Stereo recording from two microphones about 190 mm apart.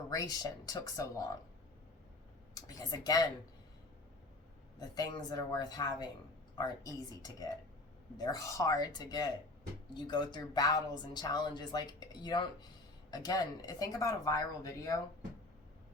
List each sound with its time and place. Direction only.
0.1 s speech: 20° left (ahead or behind)
2.6 s speech: 20° left (ahead or behind)
4.8 s speech: 20° left (ahead or behind)